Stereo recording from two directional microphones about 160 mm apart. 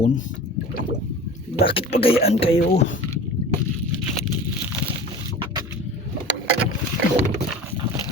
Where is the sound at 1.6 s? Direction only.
35° left (ahead or behind).